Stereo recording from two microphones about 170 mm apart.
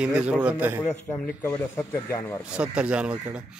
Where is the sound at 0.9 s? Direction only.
10° left (ahead or behind).